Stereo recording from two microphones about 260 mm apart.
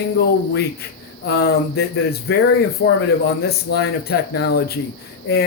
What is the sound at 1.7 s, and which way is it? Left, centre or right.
Speech, left.